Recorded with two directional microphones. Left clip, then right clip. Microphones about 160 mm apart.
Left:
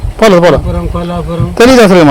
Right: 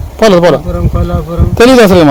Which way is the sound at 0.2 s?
10° left (ahead or behind).